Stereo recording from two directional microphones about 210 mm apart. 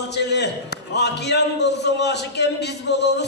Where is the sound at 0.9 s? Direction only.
55° left (ahead or behind).